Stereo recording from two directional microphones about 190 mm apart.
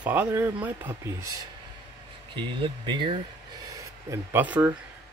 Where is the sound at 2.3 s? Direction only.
25° right (ahead or behind).